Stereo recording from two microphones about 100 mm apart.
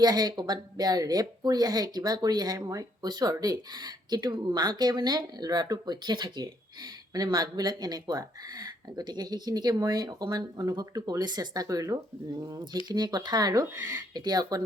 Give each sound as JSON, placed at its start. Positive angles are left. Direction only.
{"t": 0.0, "sound": "speech", "side_deg": -45}